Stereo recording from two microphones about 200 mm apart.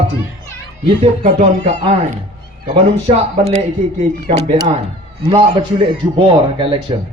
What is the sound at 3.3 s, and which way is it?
A man's voice, 35° right (ahead or behind).